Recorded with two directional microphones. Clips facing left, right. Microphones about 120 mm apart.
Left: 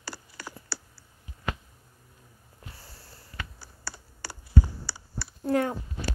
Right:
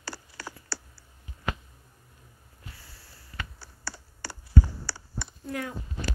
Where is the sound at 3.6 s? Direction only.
15° left (ahead or behind).